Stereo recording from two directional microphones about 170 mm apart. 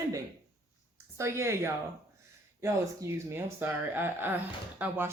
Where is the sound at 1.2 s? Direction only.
15° right (ahead or behind).